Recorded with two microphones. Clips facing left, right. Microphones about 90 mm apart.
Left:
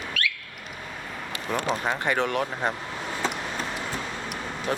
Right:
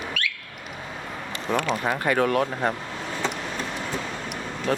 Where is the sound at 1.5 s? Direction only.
Centre (ahead or behind).